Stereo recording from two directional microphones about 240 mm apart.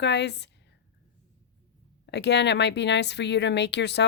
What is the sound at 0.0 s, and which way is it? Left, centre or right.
Speech, left.